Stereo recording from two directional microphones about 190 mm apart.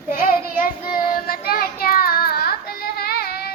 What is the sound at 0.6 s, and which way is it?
Child singing, 45° left (ahead or behind).